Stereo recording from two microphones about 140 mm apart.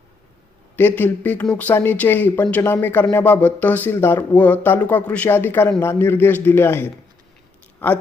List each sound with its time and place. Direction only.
0.8 s speech: 15° left (ahead or behind)